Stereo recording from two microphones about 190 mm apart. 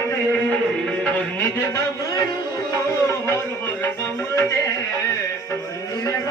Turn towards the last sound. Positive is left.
turn(degrees=15)  # may be behind; listen again after turning